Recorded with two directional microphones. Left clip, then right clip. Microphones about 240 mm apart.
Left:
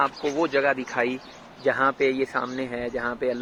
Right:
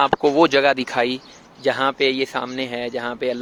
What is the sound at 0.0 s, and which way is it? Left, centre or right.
Speech, right.